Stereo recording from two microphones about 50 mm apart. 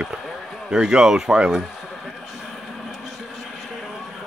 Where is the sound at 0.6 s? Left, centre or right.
Centre.